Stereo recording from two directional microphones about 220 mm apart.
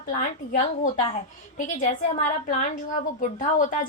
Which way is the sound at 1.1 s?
30° left (ahead or behind).